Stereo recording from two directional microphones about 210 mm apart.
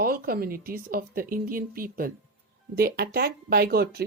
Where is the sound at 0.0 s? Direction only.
45° right (ahead or behind).